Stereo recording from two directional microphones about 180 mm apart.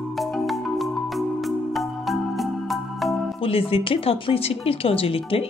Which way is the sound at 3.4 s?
30° left (ahead or behind).